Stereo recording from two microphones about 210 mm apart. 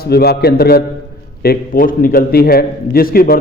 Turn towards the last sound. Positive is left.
turn(degrees=45)  # may be behind; listen again after turning